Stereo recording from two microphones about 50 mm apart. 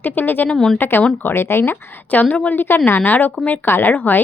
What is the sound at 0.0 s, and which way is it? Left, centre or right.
Speech, left.